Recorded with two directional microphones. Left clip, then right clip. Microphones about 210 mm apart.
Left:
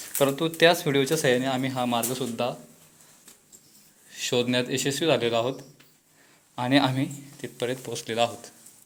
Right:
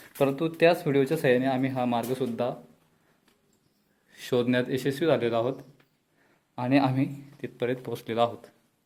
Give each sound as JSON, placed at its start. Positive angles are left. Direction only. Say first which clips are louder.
{"t": 0.2, "sound": "speech", "louder": "left 2 dB", "side_deg": -15}
{"t": 4.1, "sound": "speech", "louder": "left 1 dB", "side_deg": -25}
{"t": 6.6, "sound": "speech", "louder": "left 2 dB", "side_deg": -15}